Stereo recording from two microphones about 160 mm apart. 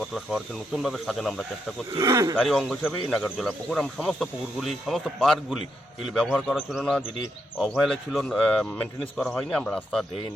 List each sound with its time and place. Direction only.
0.0 s speech: centre (ahead or behind)
2.0 s speech: 20° right (ahead or behind)
2.3 s speech: centre (ahead or behind)